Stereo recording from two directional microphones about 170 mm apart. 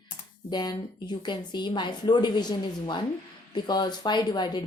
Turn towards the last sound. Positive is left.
turn(degrees=25)  # may be behind; listen again after turning